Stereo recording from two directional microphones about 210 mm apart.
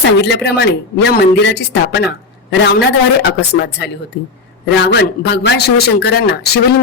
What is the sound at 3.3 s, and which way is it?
A man's voice, 50° left (ahead or behind).